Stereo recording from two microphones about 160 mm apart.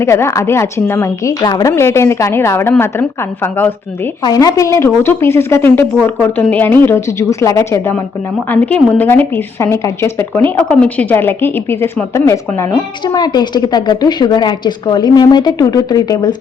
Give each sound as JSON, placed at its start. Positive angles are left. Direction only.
{"t": 0.0, "sound": "a woman's voice", "side_deg": 15}
{"t": 4.2, "sound": "a woman's voice", "side_deg": 25}